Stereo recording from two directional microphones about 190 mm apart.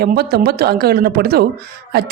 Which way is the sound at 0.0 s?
55° right (ahead or behind).